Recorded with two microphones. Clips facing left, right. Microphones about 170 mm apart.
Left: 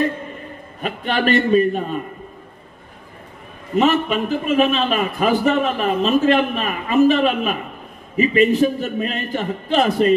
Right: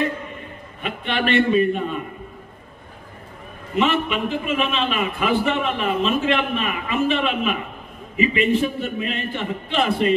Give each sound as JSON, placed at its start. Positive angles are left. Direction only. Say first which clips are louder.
{"t": 0.7, "sound": "a man's voice", "louder": "left 3 dB", "side_deg": 40}
{"t": 3.7, "sound": "a man's voice", "louder": "left 4 dB", "side_deg": 40}